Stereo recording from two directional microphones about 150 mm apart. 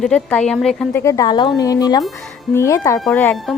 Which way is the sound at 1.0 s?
20° left (ahead or behind).